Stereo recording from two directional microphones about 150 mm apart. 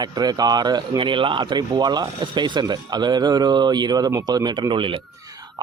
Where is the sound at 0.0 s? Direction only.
25° right (ahead or behind).